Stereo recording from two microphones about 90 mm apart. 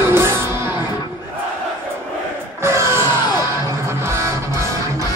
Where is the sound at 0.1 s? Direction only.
25° right (ahead or behind).